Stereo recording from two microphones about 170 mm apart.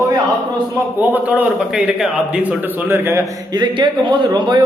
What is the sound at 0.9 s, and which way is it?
A man's voice, 10° right (ahead or behind).